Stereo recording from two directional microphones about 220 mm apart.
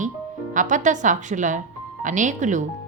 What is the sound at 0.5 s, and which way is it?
A woman's voice, 35° right (ahead or behind).